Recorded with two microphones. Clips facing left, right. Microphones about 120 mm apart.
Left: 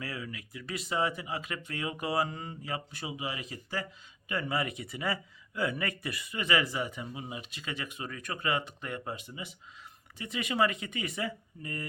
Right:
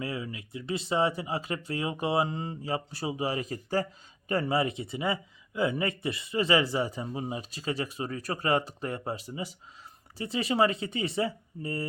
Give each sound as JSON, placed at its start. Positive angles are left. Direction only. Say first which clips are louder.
{"t": 0.0, "sound": "speech", "louder": "right 5 dB", "side_deg": -25}